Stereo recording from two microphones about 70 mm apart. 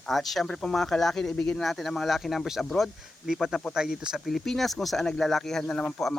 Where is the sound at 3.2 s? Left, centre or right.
Centre.